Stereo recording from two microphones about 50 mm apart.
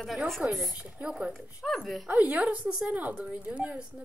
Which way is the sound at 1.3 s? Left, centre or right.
Centre.